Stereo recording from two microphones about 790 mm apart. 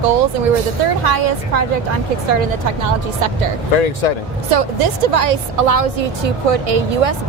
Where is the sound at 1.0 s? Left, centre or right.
Right.